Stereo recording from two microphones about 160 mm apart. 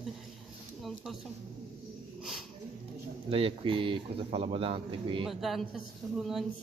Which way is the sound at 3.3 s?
35° right (ahead or behind).